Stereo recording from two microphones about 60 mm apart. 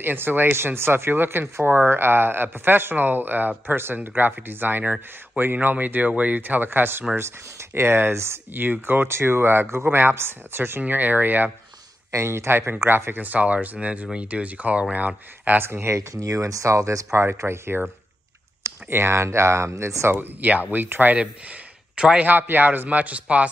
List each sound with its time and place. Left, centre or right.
0.0 s speech: right
8.5 s speech: right
10.8 s speech: right
12.1 s speech: right
15.6 s speech: right
20.2 s speech: right
21.9 s a man's voice: centre
22.2 s speech: right